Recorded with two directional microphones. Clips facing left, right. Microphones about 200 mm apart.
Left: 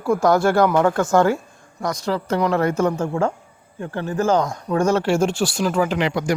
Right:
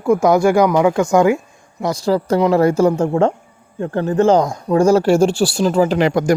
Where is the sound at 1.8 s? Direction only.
30° right (ahead or behind).